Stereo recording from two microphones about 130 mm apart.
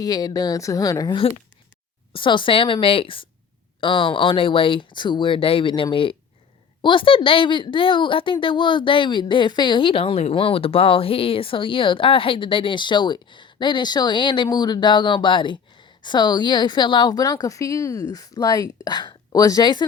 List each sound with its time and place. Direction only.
0.0 s speech: 30° left (ahead or behind)
2.1 s a woman's voice: 40° left (ahead or behind)